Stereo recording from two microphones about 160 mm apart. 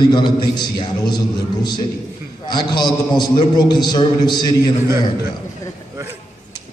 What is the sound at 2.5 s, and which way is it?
A man's voice, 25° left (ahead or behind).